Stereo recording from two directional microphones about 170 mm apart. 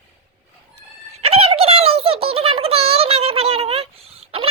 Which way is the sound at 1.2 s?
35° right (ahead or behind).